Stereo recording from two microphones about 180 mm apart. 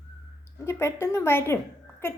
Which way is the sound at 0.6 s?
15° left (ahead or behind).